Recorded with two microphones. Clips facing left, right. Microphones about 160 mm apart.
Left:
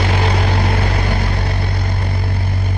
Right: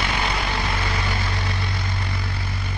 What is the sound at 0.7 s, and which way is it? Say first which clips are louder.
Vehicle: left 7 dB; 60° left (ahead or behind).